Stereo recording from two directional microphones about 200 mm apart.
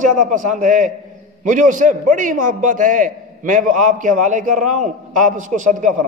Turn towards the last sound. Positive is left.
turn(degrees=-40)  # may be behind; listen again after turning